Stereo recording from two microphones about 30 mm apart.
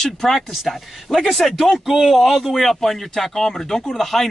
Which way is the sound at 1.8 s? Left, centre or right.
Centre.